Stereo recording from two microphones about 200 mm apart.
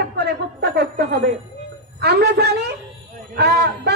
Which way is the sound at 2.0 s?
55° right (ahead or behind).